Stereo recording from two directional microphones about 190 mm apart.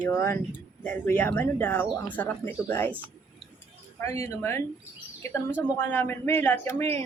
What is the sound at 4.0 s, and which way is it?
Speech, 15° left (ahead or behind).